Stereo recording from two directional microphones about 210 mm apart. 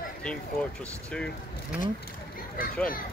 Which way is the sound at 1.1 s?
5° left (ahead or behind).